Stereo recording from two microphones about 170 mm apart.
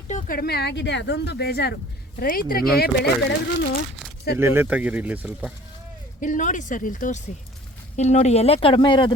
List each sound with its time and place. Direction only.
0.1 s speech: 45° left (ahead or behind)
0.3 s speech: 70° left (ahead or behind)
4.4 s speech: 15° right (ahead or behind)
6.1 s speech: 50° left (ahead or behind)
7.9 s speech: 40° left (ahead or behind)